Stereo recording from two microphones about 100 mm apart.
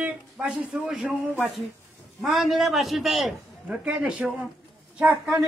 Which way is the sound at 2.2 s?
Centre (ahead or behind).